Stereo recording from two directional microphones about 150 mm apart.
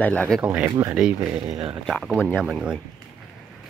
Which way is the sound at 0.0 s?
10° left (ahead or behind).